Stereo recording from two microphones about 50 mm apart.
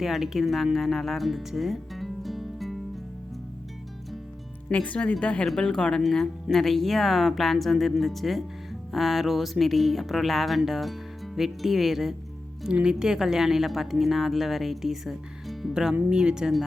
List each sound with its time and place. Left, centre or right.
0.0 s speech: centre
4.7 s speech: left
5.5 s a woman's voice: centre
12.7 s a woman's voice: centre